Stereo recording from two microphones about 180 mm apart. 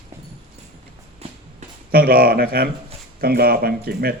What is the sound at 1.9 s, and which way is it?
Speech, 55° right (ahead or behind).